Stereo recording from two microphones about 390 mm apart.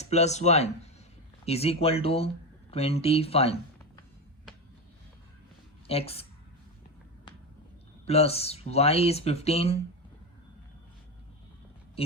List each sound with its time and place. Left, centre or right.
0.0 s speech: centre
5.9 s speech: centre
8.0 s speech: centre